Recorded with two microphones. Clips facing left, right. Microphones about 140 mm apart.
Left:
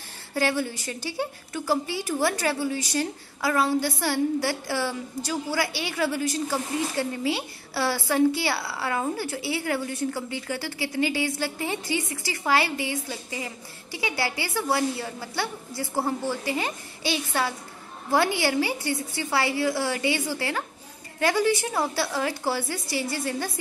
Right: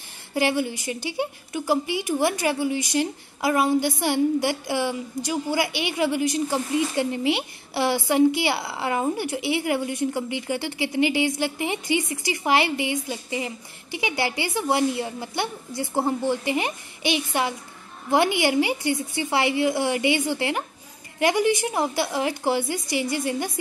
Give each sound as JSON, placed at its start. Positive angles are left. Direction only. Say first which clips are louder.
{"t": 0.3, "sound": "a woman's voice", "louder": "right 2 dB", "side_deg": -15}